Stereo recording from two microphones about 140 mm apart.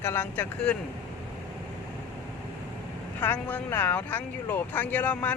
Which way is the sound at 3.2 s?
10° left (ahead or behind).